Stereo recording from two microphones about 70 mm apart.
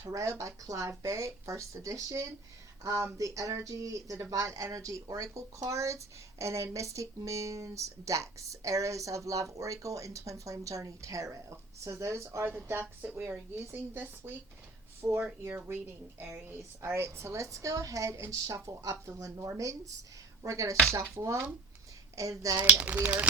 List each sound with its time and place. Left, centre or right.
0.0 s speech: right
13.0 s a woman's voice: right
23.0 s speech: right